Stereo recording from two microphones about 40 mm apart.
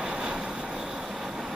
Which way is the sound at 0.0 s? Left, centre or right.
Right.